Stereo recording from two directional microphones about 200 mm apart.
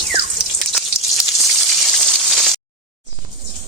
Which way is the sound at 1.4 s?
Centre (ahead or behind).